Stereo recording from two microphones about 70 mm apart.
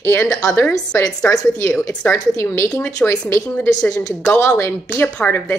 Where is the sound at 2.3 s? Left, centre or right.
Left.